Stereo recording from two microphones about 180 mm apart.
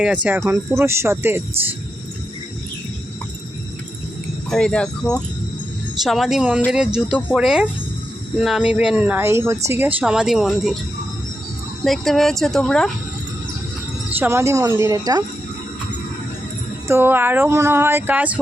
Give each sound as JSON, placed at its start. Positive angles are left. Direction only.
{"t": 0.0, "sound": "speech", "side_deg": -5}
{"t": 4.4, "sound": "speech", "side_deg": 5}
{"t": 11.8, "sound": "speech", "side_deg": 0}
{"t": 14.1, "sound": "speech", "side_deg": -15}
{"t": 16.9, "sound": "speech", "side_deg": -10}